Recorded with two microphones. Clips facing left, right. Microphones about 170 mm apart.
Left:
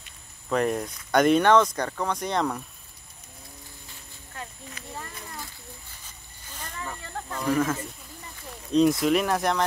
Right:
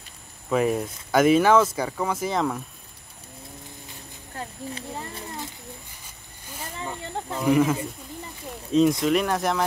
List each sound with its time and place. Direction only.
0.5 s speech: 5° right (ahead or behind)
4.4 s a sound: 30° right (ahead or behind)
6.8 s snake: 25° right (ahead or behind)
7.3 s speech: 15° right (ahead or behind)